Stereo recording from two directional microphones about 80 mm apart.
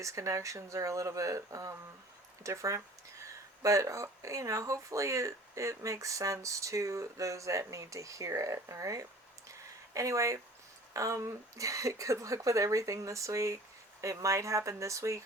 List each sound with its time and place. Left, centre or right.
0.0 s speech: right